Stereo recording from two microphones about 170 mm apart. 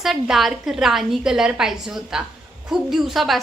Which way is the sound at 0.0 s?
Centre (ahead or behind).